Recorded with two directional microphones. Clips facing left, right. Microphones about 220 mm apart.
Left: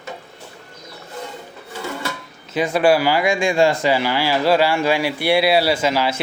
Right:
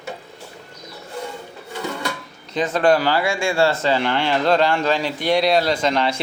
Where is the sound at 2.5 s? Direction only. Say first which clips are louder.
Left 1 dB; 10° left (ahead or behind).